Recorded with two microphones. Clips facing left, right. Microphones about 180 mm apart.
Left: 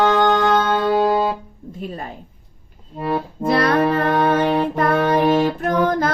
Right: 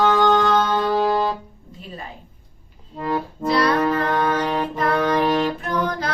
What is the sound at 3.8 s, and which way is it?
Child singing, 25° left (ahead or behind).